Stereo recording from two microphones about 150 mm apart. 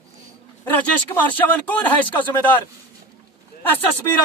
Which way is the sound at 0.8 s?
10° left (ahead or behind).